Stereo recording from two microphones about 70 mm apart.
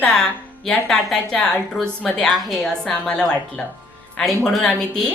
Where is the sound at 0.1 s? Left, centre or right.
Centre.